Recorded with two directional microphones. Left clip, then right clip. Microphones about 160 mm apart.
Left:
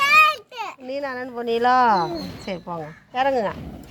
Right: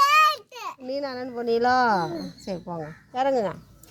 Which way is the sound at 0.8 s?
Centre (ahead or behind).